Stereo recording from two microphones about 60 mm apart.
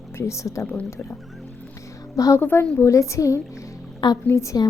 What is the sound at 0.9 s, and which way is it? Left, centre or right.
Speech, left.